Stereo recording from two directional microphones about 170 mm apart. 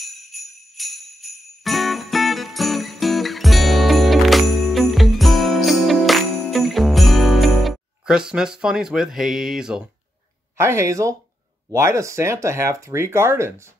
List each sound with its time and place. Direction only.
0.7 s jingle bell: centre (ahead or behind)
10.6 s speech: 15° right (ahead or behind)